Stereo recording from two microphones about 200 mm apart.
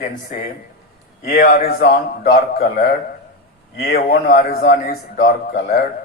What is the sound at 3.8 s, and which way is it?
A man's voice, 50° left (ahead or behind).